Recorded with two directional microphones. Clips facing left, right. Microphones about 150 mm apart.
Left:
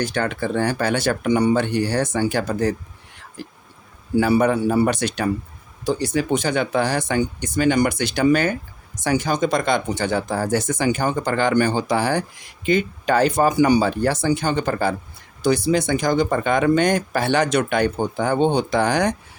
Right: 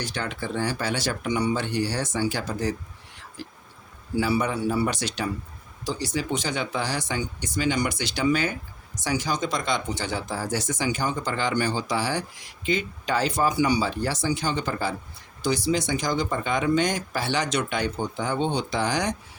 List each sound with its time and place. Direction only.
0.0 s speech: 55° left (ahead or behind)